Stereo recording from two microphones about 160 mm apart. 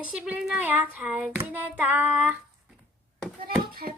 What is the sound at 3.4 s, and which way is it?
Hands, 65° right (ahead or behind).